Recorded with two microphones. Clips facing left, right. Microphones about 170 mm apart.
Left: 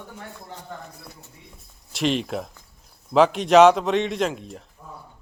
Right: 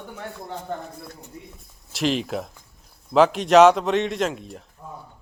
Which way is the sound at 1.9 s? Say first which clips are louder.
Even; centre (ahead or behind).